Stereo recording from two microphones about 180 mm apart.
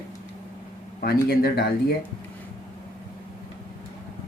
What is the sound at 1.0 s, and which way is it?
Speech, 60° left (ahead or behind).